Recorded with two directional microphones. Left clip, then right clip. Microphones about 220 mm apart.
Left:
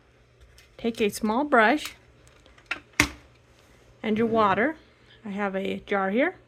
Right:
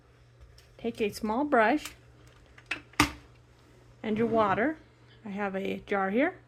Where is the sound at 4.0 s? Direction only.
15° left (ahead or behind).